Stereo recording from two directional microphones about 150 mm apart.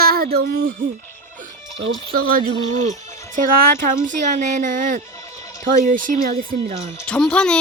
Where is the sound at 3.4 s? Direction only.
65° right (ahead or behind).